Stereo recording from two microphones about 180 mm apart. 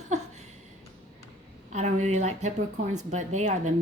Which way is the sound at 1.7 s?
40° right (ahead or behind).